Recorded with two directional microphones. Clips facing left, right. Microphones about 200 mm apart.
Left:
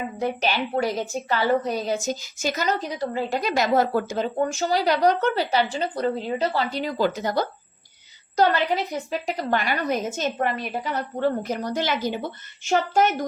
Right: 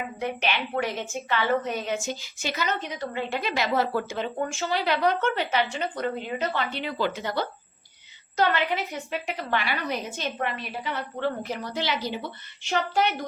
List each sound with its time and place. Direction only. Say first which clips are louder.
0.2 s a woman's voice: left 4 dB; 40° left (ahead or behind)